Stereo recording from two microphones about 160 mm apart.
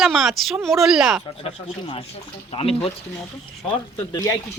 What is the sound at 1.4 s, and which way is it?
Speech, 35° left (ahead or behind).